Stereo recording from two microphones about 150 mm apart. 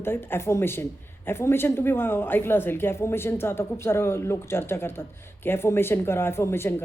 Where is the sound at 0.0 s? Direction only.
15° left (ahead or behind).